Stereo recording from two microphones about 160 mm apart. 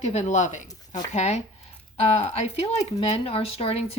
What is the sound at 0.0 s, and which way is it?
Speech, 45° left (ahead or behind).